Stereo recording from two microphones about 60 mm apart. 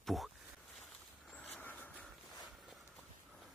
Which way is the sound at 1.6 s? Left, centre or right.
Left.